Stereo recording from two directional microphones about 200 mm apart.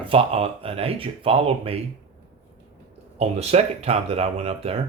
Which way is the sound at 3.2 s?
30° right (ahead or behind).